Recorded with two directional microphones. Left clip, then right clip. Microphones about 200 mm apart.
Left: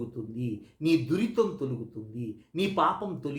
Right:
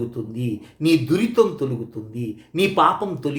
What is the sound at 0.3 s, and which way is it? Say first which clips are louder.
Speech: right 8 dB; 10° right (ahead or behind).